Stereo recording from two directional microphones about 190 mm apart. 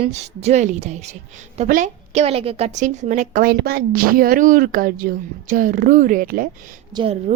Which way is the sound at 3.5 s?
55° right (ahead or behind).